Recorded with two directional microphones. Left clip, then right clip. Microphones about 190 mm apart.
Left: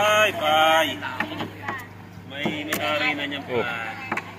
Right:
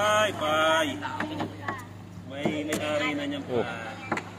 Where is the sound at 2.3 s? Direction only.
70° right (ahead or behind).